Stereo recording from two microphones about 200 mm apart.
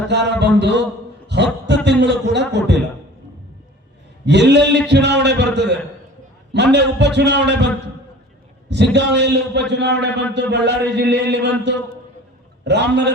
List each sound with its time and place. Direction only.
0.1 s a man's voice: 60° right (ahead or behind)
1.3 s a sound: 60° right (ahead or behind)
1.6 s a man's voice: 60° right (ahead or behind)
4.3 s a man's voice: 60° right (ahead or behind)
8.7 s a man's voice: 60° right (ahead or behind)
12.6 s a man's voice: 60° right (ahead or behind)